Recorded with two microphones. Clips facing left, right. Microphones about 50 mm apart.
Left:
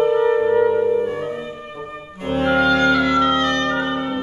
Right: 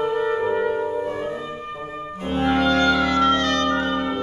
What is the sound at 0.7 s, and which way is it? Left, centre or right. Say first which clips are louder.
Brass instrument: left 6 dB; centre.